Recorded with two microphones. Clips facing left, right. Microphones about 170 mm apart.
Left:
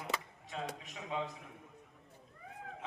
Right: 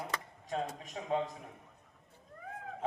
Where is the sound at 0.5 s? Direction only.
40° right (ahead or behind).